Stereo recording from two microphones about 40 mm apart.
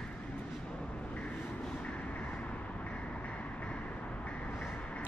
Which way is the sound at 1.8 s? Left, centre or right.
Left.